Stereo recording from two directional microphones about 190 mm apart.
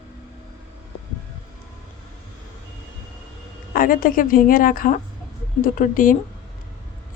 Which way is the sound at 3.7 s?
45° left (ahead or behind).